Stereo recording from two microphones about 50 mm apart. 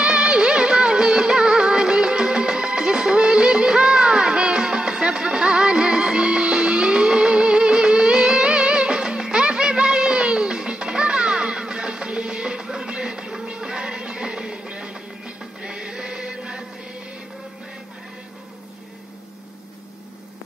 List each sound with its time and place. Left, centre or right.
0.0 s music: centre